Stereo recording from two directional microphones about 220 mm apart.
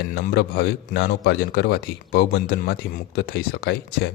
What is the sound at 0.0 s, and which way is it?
A man's voice, 45° left (ahead or behind).